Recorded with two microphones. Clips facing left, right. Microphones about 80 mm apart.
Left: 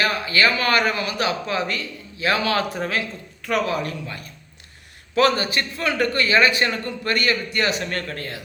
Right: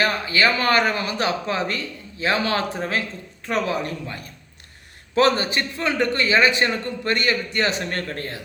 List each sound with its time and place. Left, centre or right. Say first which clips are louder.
0.0 s a man's voice: even; right